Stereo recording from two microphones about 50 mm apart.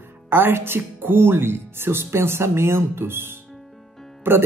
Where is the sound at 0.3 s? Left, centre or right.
Right.